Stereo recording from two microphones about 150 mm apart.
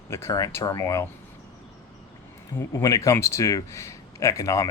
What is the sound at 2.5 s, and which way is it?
Speech, 20° left (ahead or behind).